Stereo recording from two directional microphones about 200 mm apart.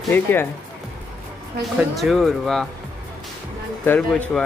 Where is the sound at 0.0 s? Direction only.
10° left (ahead or behind).